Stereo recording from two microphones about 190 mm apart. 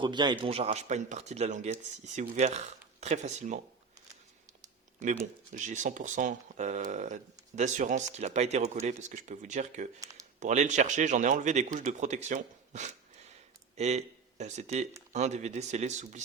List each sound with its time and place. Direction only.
0.0 s speech: 25° right (ahead or behind); by 3.6 s 40° right (ahead or behind)
5.5 s speech: 40° right (ahead or behind)